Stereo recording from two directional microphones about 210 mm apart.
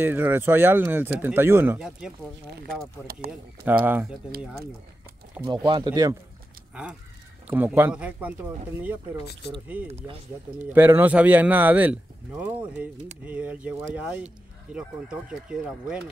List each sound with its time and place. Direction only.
0.0 s speech: 10° right (ahead or behind)
3.6 s speech: 10° right (ahead or behind)
5.4 s speech: 10° right (ahead or behind)
6.7 s speech: 5° right (ahead or behind)
9.8 s speech: 30° right (ahead or behind)
10.7 s speech: 10° right (ahead or behind)